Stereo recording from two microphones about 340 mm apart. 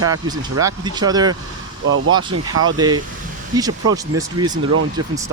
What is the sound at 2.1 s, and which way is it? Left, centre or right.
Speech, centre.